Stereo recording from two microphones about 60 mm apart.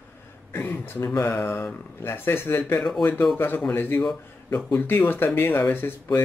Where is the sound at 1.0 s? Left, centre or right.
Left.